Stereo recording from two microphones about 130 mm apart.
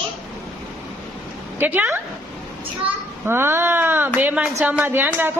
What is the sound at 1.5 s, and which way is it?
Speech, 15° right (ahead or behind).